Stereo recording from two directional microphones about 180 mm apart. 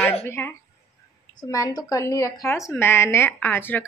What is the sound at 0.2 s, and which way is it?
Speech, 15° left (ahead or behind).